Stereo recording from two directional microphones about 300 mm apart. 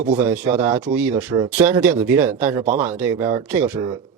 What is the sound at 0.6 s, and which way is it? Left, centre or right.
Speech, centre.